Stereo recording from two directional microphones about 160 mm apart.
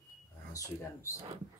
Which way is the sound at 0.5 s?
20° left (ahead or behind).